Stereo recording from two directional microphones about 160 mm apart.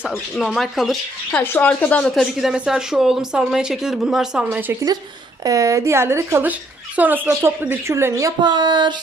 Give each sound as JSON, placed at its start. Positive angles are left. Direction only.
{"t": 0.3, "sound": "a woman's voice", "side_deg": 0}
{"t": 1.4, "sound": "a woman's voice", "side_deg": 10}